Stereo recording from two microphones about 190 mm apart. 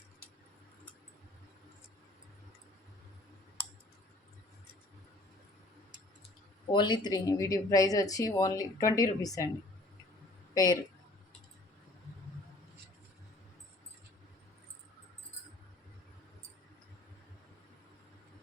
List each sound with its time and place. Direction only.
6.7 s speech: 25° left (ahead or behind)
10.5 s speech: 20° left (ahead or behind)